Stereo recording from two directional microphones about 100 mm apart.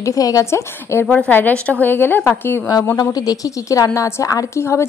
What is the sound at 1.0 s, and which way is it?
A woman's voice, 15° left (ahead or behind).